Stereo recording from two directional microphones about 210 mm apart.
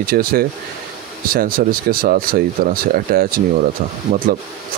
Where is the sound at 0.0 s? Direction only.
45° right (ahead or behind).